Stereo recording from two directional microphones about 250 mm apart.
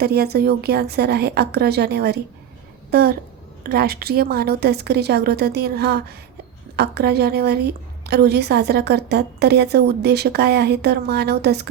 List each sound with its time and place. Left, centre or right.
0.0 s a woman's voice: right